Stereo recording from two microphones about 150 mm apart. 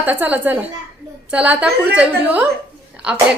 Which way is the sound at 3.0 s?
10° right (ahead or behind).